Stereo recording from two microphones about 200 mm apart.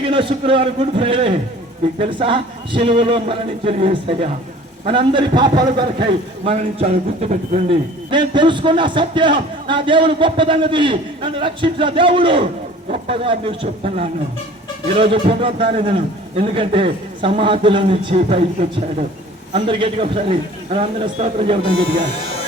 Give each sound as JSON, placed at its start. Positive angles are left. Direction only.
{"t": 0.0, "sound": "a man's voice", "side_deg": -25}
{"t": 8.1, "sound": "a man's voice", "side_deg": -25}
{"t": 19.5, "sound": "a man's voice", "side_deg": -25}